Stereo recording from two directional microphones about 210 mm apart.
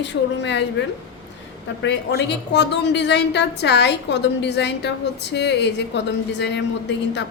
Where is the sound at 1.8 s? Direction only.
55° left (ahead or behind).